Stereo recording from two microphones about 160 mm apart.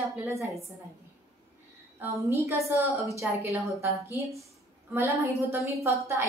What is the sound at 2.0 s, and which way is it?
Speech, 15° right (ahead or behind).